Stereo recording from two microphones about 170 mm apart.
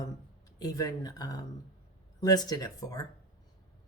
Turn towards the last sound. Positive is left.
turn(degrees=20)  # may be behind; listen again after turning